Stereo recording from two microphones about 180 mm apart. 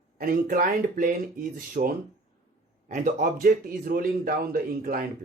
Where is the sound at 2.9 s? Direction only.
45° right (ahead or behind).